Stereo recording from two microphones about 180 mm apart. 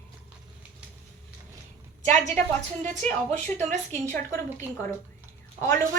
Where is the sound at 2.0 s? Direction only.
40° right (ahead or behind).